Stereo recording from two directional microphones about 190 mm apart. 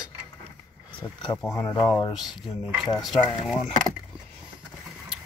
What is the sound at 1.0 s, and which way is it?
Speech, 5° left (ahead or behind).